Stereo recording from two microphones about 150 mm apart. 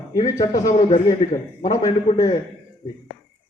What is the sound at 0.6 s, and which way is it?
Speech, 55° left (ahead or behind).